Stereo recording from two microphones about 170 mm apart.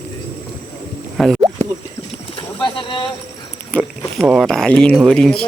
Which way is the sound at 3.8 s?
5° right (ahead or behind).